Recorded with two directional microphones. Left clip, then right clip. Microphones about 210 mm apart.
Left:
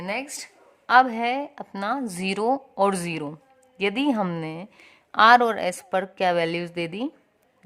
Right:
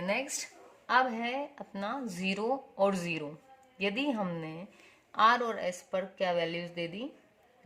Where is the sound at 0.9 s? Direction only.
40° left (ahead or behind).